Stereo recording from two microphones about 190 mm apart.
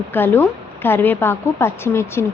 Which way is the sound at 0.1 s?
10° left (ahead or behind).